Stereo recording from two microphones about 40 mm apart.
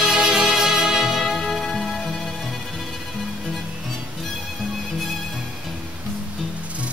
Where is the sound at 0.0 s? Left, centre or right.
Centre.